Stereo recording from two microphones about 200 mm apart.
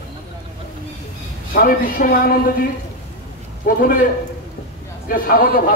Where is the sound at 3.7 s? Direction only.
45° left (ahead or behind).